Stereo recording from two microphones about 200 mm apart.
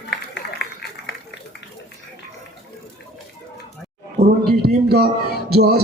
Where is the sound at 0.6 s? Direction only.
60° left (ahead or behind).